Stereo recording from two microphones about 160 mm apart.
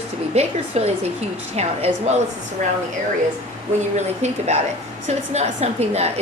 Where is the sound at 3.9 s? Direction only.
45° right (ahead or behind).